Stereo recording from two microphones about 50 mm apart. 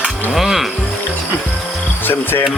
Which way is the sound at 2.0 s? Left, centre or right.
Left.